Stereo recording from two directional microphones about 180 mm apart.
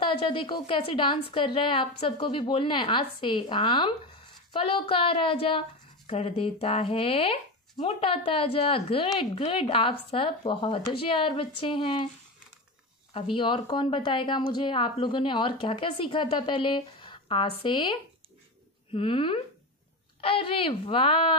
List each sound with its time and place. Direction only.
0.0 s a woman's voice: 30° left (ahead or behind)
13.1 s a woman's voice: 30° left (ahead or behind)
18.9 s a woman's voice: 30° left (ahead or behind)